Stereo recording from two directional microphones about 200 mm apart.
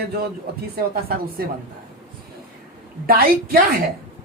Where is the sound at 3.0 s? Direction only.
45° right (ahead or behind).